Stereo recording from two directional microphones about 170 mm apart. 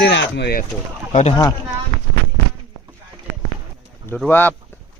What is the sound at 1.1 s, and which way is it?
Speech, 40° left (ahead or behind).